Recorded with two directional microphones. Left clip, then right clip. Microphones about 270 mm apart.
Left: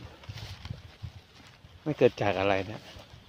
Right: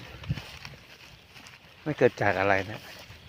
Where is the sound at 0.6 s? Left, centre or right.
Centre.